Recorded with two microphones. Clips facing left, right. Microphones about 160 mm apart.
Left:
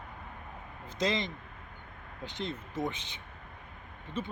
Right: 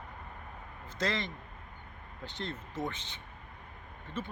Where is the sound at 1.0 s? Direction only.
15° left (ahead or behind).